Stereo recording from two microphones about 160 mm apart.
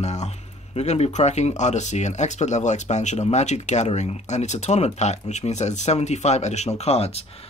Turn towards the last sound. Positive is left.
turn(degrees=40)  # may be behind; listen again after turning